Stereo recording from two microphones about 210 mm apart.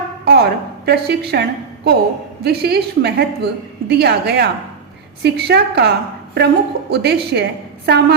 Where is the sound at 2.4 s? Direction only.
50° right (ahead or behind).